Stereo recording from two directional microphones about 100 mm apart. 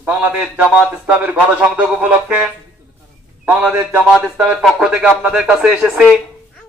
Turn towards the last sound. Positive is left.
turn(degrees=-5)  # may be behind; listen again after turning